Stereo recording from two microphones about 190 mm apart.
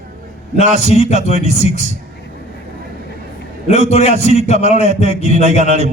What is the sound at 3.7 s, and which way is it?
A man's voice, 35° left (ahead or behind).